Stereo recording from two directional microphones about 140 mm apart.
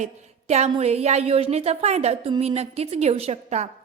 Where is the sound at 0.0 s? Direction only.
55° right (ahead or behind).